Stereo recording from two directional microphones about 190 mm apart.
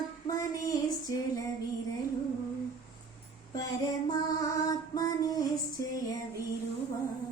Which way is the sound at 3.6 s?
20° left (ahead or behind).